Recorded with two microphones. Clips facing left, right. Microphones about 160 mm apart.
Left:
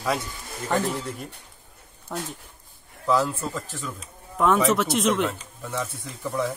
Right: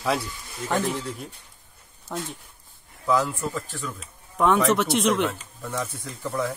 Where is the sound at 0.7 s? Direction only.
Centre (ahead or behind).